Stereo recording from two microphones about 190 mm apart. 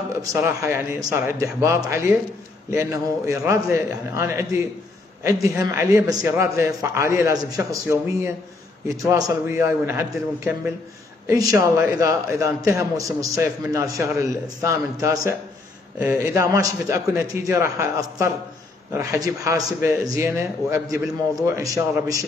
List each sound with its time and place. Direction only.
0.2 s a man's voice: 15° right (ahead or behind)